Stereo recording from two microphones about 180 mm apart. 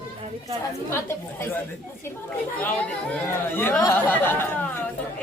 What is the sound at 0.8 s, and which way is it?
Speech, 15° left (ahead or behind).